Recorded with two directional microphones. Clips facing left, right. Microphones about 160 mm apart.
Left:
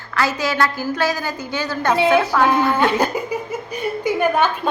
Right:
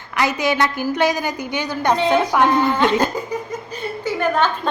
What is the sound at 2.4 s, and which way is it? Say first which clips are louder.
A woman's voice: even; 10° left (ahead or behind).